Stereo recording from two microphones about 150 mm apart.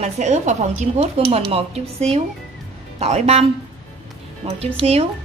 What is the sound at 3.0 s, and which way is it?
Speech, 45° right (ahead or behind).